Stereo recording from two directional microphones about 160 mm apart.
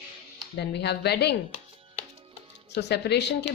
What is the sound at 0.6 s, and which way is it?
Speech, 90° left.